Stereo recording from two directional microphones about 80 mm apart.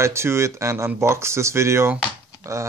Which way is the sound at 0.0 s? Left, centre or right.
Right.